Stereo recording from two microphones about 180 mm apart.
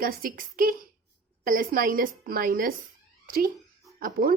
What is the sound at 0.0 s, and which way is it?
Speech, 50° right (ahead or behind).